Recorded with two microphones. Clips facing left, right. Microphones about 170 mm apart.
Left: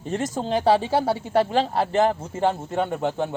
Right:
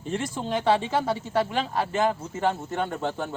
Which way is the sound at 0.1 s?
40° left (ahead or behind).